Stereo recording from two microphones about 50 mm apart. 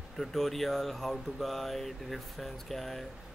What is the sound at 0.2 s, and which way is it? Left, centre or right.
Speech, centre.